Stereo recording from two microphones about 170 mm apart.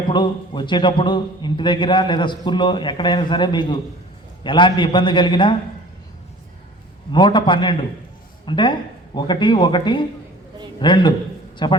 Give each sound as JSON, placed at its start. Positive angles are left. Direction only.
{"t": 0.1, "sound": "a man's voice", "side_deg": 25}
{"t": 7.1, "sound": "a man's voice", "side_deg": 30}